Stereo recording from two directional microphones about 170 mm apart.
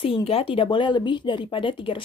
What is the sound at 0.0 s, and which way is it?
A woman's voice, 30° left (ahead or behind).